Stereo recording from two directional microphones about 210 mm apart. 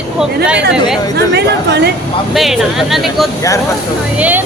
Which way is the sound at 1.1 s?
50° right (ahead or behind).